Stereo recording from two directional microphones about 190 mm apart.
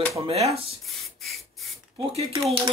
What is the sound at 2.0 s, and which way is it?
Speech, 30° right (ahead or behind).